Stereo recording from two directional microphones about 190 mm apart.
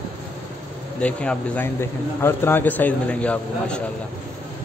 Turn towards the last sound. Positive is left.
turn(degrees=5)  # may be behind; listen again after turning